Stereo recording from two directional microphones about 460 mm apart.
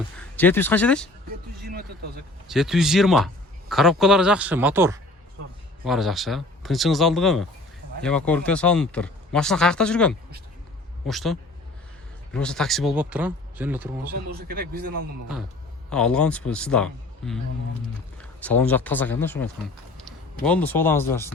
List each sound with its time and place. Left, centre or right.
0.2 s speech: centre
2.5 s speech: centre
14.3 s a man's voice: centre
15.9 s speech: centre